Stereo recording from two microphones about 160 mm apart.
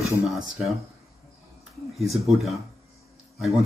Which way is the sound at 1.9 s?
Centre (ahead or behind).